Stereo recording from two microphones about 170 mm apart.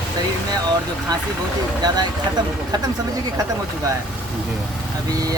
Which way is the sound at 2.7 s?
25° right (ahead or behind).